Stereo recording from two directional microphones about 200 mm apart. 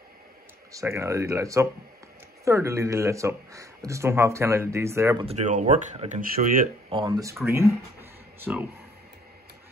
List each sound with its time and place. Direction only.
0.7 s speech: 15° right (ahead or behind)
5.2 s speech: 35° right (ahead or behind)
6.9 s speech: 20° right (ahead or behind)